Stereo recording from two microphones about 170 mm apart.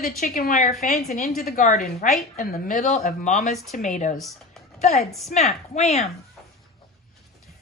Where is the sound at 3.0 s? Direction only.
45° left (ahead or behind).